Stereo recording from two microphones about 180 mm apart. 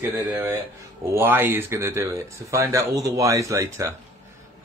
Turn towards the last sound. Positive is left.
turn(degrees=-15)  # may be behind; listen again after turning